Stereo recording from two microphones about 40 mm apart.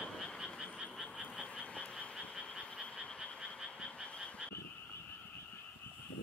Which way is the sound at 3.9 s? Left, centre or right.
Left.